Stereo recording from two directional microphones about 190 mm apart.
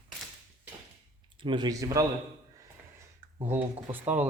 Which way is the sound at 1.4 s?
25° right (ahead or behind).